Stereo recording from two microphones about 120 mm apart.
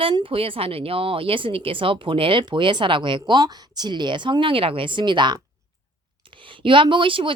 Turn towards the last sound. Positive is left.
turn(degrees=-45)  # may be behind; listen again after turning